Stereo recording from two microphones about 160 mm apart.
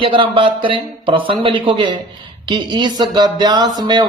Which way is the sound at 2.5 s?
30° right (ahead or behind).